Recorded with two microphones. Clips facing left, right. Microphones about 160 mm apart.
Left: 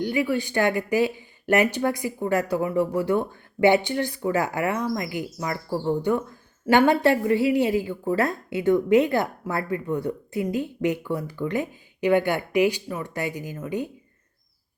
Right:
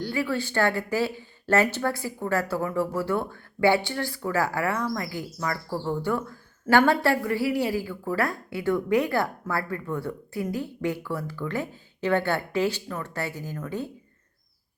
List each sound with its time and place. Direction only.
0.0 s a woman's voice: 20° left (ahead or behind)